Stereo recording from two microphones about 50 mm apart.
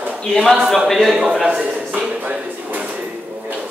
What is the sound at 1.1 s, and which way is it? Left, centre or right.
Speech, centre.